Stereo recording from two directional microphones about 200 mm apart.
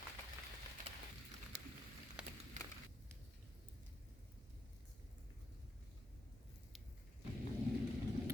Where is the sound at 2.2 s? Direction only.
5° right (ahead or behind).